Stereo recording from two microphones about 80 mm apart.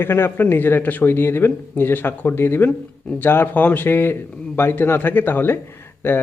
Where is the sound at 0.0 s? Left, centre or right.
Left.